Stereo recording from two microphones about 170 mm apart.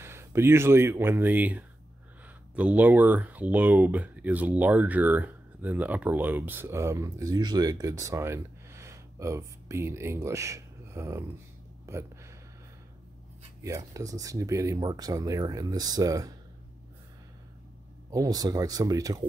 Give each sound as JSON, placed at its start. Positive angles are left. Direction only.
{"t": 0.0, "sound": "speech", "side_deg": -15}
{"t": 11.8, "sound": "a sound", "side_deg": -15}
{"t": 13.7, "sound": "speech", "side_deg": -20}
{"t": 18.1, "sound": "speech", "side_deg": -20}